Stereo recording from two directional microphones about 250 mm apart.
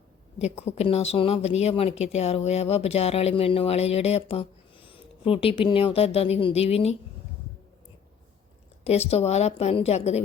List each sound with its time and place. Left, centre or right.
0.3 s speech: left
8.8 s speech: left